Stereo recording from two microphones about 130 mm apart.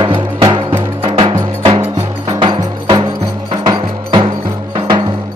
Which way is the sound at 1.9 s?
35° right (ahead or behind).